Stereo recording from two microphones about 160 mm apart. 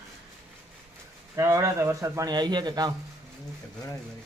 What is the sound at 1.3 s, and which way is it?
Speech, 15° right (ahead or behind).